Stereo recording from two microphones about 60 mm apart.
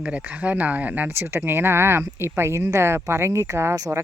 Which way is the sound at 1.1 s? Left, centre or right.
Right.